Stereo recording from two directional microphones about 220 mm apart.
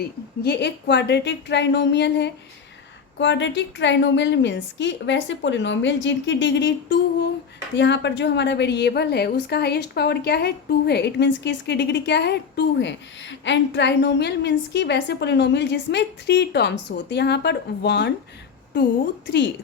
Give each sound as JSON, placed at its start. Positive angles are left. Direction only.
{"t": 0.0, "sound": "a woman's voice", "side_deg": 50}